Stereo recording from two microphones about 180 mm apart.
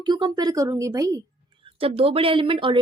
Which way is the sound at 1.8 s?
30° right (ahead or behind).